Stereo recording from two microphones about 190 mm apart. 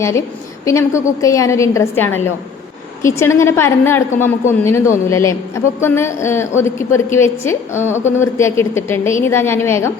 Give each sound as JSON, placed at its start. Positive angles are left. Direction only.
{"t": 0.0, "sound": "a woman's voice", "side_deg": 15}